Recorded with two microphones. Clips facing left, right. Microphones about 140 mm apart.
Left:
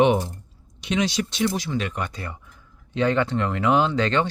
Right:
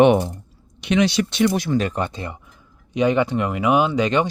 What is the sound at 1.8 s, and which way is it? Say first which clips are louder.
Speech: right 5 dB; 35° right (ahead or behind).